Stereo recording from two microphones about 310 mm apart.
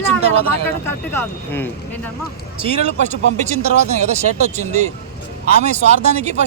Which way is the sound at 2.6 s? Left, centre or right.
Right.